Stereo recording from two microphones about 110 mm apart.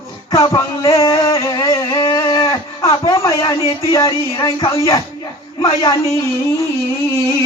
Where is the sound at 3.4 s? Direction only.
35° left (ahead or behind).